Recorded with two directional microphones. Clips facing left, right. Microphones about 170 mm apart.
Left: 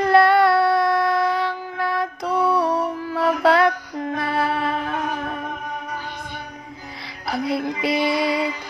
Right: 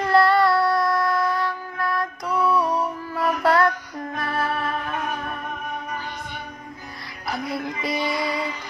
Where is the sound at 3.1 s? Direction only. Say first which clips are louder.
Left 3 dB; 75° left (ahead or behind).